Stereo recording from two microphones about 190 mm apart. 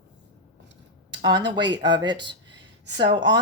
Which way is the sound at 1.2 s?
25° right (ahead or behind).